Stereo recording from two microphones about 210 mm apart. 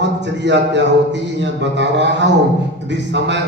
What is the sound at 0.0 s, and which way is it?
A man's voice, 55° right (ahead or behind).